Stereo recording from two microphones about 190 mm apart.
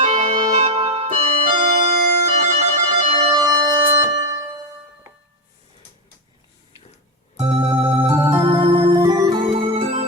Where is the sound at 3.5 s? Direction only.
15° right (ahead or behind).